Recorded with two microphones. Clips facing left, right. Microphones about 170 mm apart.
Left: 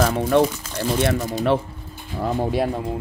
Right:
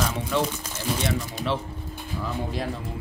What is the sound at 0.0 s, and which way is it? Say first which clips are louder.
Speech: left 8 dB; 55° left (ahead or behind).